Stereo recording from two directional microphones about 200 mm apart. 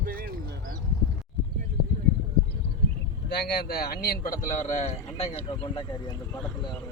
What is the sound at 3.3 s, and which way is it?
A man's voice, 55° left (ahead or behind).